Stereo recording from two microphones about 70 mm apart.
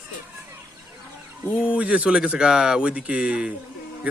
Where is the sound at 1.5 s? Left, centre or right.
Centre.